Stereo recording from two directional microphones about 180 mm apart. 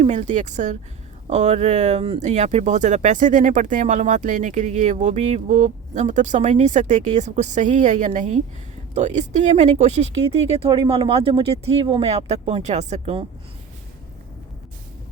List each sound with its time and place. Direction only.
0.0 s speech: 40° right (ahead or behind)